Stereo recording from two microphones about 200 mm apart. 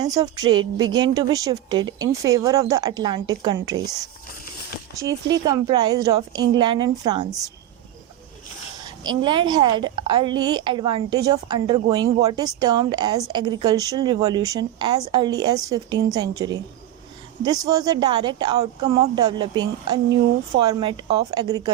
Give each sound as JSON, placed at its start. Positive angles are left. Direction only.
{"t": 0.0, "sound": "a woman's voice", "side_deg": -20}
{"t": 9.0, "sound": "a woman's voice", "side_deg": -20}